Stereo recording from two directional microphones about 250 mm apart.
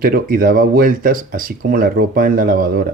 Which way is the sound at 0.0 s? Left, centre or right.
Right.